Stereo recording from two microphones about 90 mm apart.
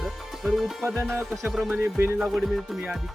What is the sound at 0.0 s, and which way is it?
Music, centre (ahead or behind).